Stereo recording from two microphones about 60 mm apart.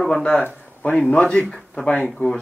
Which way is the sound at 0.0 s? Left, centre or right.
Centre.